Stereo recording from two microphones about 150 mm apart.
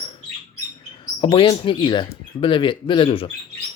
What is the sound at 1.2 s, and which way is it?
Speech, 35° left (ahead or behind).